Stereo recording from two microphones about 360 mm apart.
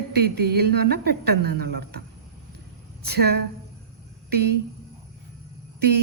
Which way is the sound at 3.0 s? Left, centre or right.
Right.